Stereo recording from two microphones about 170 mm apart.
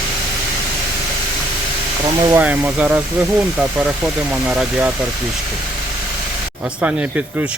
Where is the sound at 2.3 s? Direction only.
10° right (ahead or behind).